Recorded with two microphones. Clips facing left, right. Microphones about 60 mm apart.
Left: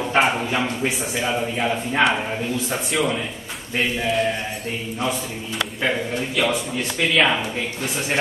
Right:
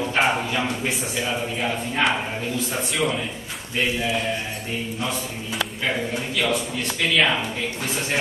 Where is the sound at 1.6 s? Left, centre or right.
Centre.